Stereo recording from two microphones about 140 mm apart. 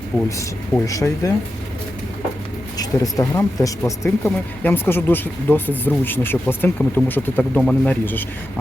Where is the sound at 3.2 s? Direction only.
20° left (ahead or behind).